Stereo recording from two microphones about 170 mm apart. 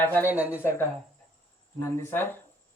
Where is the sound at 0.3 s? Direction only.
10° right (ahead or behind).